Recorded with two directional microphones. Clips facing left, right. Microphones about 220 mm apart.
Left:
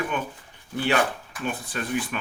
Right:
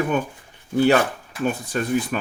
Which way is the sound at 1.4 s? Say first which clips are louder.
Right 6 dB; 40° right (ahead or behind).